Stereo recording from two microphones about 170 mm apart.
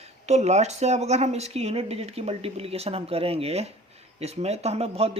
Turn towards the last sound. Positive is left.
turn(degrees=-35)  # may be behind; listen again after turning